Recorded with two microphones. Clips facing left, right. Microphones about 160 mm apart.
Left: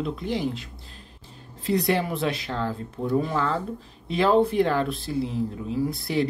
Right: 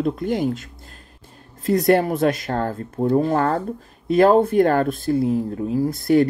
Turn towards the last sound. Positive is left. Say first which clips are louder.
# right 8 dB
turn(degrees=-45)  # may be behind; listen again after turning